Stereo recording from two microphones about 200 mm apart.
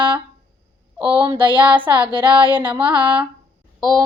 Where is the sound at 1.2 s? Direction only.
25° right (ahead or behind).